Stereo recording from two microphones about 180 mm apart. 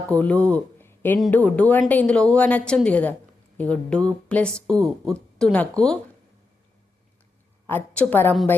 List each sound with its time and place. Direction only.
0.1 s a woman's voice: 5° left (ahead or behind)
7.7 s a woman's voice: 10° left (ahead or behind)